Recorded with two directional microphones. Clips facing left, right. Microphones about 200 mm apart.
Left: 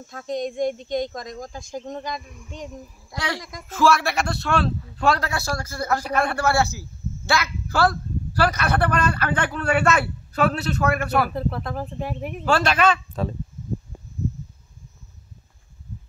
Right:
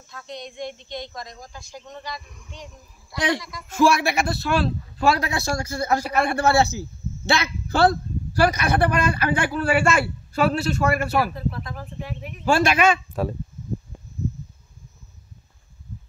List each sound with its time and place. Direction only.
0.0 s speech: 45° left (ahead or behind)
3.7 s a man's voice: 15° right (ahead or behind)
6.3 s a man's voice: 20° right (ahead or behind); by 11.1 s centre (ahead or behind)
11.3 s speech: 60° left (ahead or behind)
12.4 s a man's voice: 10° right (ahead or behind)